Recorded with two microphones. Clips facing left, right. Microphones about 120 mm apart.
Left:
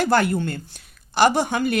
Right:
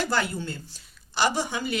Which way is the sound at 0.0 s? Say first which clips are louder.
Left 8 dB; 55° left (ahead or behind).